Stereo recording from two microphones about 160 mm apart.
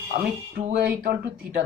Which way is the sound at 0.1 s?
50° right (ahead or behind).